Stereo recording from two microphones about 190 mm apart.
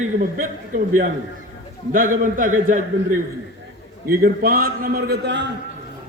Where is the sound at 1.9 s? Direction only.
45° right (ahead or behind); by 5.5 s 65° right (ahead or behind).